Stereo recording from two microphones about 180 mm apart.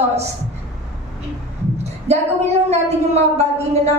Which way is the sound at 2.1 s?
35° right (ahead or behind).